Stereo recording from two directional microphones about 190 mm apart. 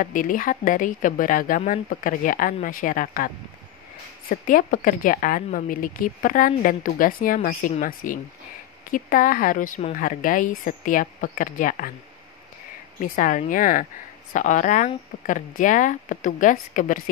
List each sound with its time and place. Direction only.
0.0 s a woman's voice: 45° left (ahead or behind)
4.3 s a woman's voice: 45° left (ahead or behind)
13.0 s a woman's voice: 45° left (ahead or behind)